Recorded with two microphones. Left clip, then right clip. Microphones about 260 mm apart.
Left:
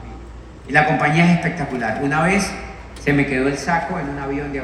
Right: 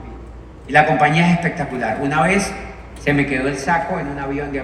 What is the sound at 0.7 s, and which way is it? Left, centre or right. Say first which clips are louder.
A man's voice: right 3 dB; right.